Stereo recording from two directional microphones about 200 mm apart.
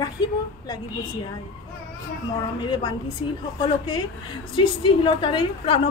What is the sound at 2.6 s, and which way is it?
A woman's voice, 25° left (ahead or behind).